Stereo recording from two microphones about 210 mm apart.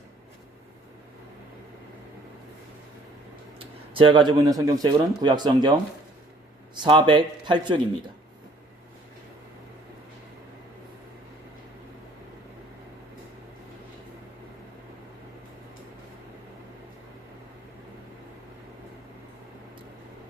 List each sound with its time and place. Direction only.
3.9 s speech: 25° right (ahead or behind)